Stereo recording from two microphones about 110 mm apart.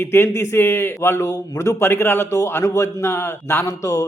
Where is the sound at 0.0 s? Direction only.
20° left (ahead or behind).